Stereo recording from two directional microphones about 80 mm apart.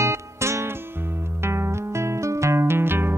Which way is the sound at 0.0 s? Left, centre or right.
Right.